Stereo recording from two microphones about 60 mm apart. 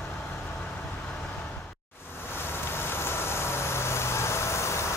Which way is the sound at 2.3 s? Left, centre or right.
Left.